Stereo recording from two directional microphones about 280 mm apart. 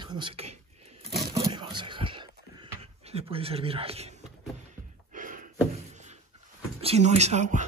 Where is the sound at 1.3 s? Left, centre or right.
Centre.